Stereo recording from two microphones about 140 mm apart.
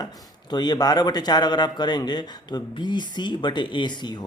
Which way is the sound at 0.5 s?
30° left (ahead or behind).